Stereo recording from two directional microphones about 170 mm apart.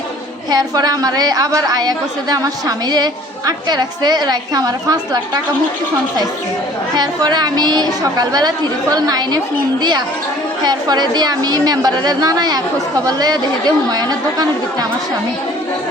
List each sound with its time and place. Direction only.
0.5 s a woman's voice: 20° right (ahead or behind)
6.9 s a woman's voice: 25° right (ahead or behind)
10.6 s a woman's voice: 25° right (ahead or behind)